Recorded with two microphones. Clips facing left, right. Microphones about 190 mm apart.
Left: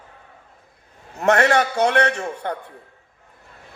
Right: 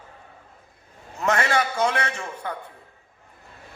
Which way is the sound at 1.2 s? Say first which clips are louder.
Left 6 dB; 65° left (ahead or behind).